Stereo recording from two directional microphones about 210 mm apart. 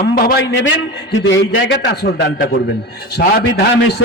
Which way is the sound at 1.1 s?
60° left (ahead or behind).